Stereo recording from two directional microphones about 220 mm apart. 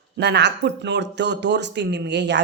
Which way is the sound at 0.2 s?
50° right (ahead or behind).